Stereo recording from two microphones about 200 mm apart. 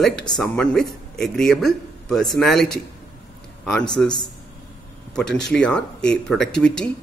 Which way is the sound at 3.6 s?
5° left (ahead or behind).